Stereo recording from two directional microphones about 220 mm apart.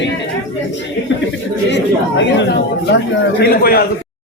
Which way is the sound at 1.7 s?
55° left (ahead or behind).